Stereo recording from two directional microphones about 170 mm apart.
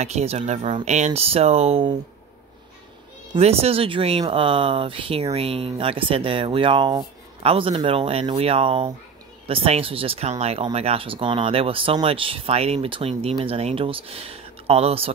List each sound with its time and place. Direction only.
0.0 s speech: 40° right (ahead or behind)
3.3 s speech: 35° right (ahead or behind)